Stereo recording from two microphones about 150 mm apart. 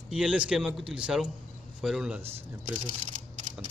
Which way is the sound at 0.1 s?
5° right (ahead or behind).